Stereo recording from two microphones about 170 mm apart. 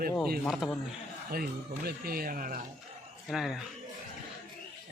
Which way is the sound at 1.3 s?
60° right (ahead or behind).